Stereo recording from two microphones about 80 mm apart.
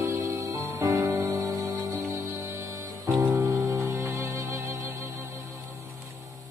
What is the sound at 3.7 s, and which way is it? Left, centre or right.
Music, right.